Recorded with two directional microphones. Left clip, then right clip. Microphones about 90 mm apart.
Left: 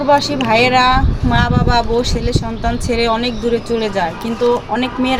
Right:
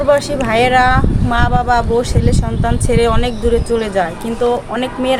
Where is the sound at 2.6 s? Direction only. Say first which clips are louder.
Right 3 dB; 30° right (ahead or behind).